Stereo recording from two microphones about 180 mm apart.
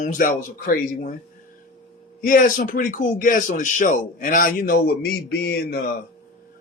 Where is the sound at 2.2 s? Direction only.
50° left (ahead or behind).